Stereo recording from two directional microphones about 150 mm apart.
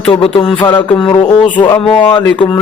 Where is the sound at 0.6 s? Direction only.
30° left (ahead or behind).